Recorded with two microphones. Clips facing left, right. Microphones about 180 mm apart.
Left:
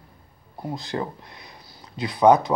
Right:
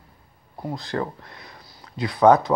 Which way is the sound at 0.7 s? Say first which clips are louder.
Right 2 dB; 20° left (ahead or behind).